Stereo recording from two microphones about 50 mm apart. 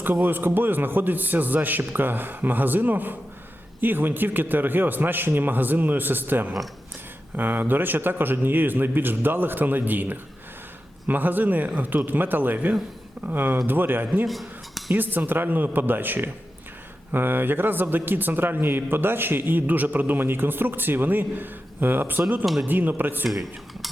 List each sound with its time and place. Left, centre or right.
0.0 s a man's voice: right
14.3 s speech: centre
14.9 s a man's voice: right
23.3 s speech: centre